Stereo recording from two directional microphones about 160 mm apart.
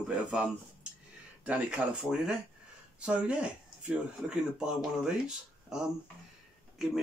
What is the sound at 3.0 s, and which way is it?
Speech, 5° right (ahead or behind).